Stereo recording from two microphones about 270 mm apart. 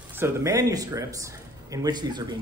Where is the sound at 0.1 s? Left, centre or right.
Centre.